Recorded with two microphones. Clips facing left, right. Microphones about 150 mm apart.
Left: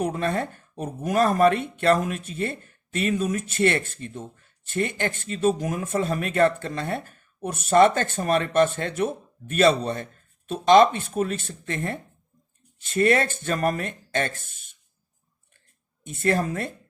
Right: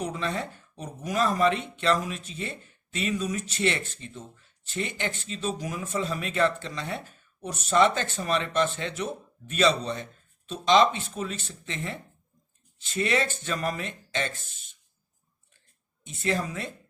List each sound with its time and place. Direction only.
0.0 s speech: 55° left (ahead or behind)
16.0 s speech: 50° left (ahead or behind)